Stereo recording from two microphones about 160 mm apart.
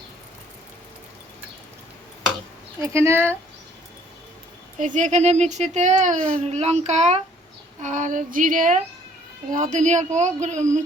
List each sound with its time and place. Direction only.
2.8 s speech: 15° right (ahead or behind)
4.8 s speech: 50° right (ahead or behind)
6.1 s a child's voice: 5° left (ahead or behind)
6.4 s speech: 45° right (ahead or behind)